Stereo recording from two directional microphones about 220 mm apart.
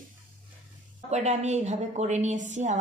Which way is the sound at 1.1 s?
30° right (ahead or behind).